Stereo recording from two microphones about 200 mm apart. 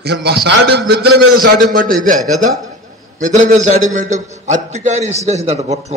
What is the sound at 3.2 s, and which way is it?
A man's voice, 40° right (ahead or behind).